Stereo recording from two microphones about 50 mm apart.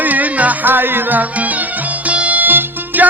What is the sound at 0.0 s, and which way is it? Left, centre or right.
Music, right.